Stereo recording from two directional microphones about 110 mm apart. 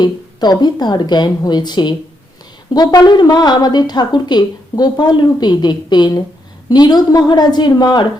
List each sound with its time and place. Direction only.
0.0 s a woman's voice: 40° left (ahead or behind)